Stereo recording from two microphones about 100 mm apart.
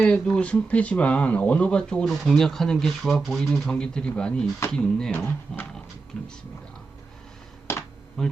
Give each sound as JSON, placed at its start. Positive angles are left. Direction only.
{"t": 0.0, "sound": "speech", "side_deg": 10}
{"t": 7.7, "sound": "computer keyboard", "side_deg": 25}
{"t": 8.2, "sound": "bee", "side_deg": 5}